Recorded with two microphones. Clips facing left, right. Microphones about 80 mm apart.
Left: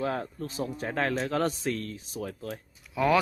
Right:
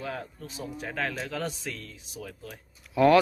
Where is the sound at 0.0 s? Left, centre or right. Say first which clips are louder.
Left 5 dB; left.